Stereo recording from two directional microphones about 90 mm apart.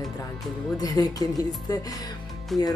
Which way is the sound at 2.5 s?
Centre (ahead or behind).